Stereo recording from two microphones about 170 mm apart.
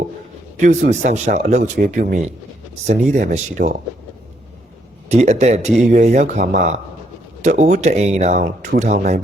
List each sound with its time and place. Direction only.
0.5 s speech: 45° right (ahead or behind); by 2.2 s 60° right (ahead or behind)
3.1 s speech: 45° right (ahead or behind)
5.0 s speech: 40° right (ahead or behind); by 8.8 s 55° right (ahead or behind)
8.8 s speech: 45° right (ahead or behind)